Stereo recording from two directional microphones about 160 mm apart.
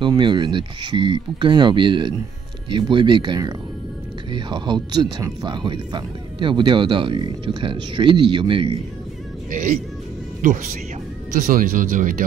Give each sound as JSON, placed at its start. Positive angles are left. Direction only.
{"t": 0.0, "sound": "speech", "side_deg": -30}
{"t": 9.5, "sound": "speech", "side_deg": -55}